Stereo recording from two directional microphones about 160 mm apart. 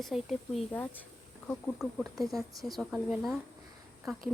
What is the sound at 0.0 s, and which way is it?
Speech, centre (ahead or behind).